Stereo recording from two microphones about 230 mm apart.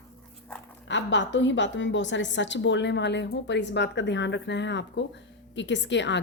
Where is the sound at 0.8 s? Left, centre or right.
Left.